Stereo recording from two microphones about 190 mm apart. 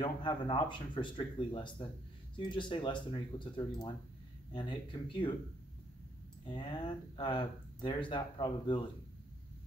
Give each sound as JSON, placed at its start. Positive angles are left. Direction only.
{"t": 0.0, "sound": "speech", "side_deg": 25}
{"t": 6.4, "sound": "speech", "side_deg": 25}